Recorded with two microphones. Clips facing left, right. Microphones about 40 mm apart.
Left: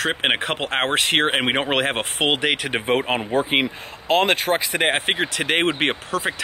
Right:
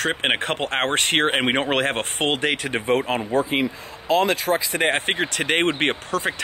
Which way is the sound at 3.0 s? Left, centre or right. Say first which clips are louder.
Left 1 dB; left.